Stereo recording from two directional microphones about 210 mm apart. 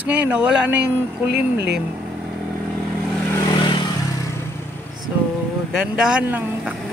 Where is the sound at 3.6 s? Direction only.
20° left (ahead or behind).